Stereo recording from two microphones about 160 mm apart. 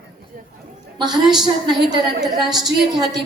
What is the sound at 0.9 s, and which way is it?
A woman's voice, 25° right (ahead or behind).